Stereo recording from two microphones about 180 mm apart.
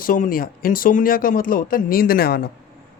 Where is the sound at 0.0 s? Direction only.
50° left (ahead or behind).